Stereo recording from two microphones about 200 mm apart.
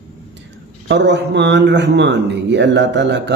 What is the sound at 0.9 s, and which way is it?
A man's voice, 60° right (ahead or behind).